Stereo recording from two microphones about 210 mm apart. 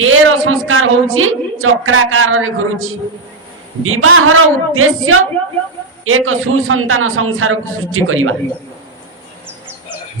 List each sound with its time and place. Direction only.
0.0 s a woman's voice: 70° right (ahead or behind)